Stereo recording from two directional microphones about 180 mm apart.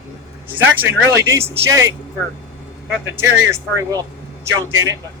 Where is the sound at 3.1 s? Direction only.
15° right (ahead or behind).